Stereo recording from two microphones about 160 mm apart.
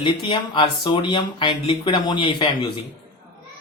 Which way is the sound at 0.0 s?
30° left (ahead or behind).